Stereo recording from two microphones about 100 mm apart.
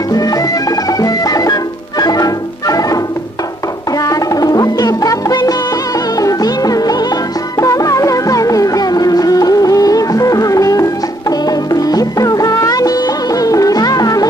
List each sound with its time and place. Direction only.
0.1 s music: 40° left (ahead or behind)
4.0 s music: 35° left (ahead or behind)